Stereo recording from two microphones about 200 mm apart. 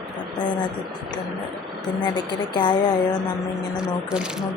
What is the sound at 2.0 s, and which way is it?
A woman's voice, 20° left (ahead or behind).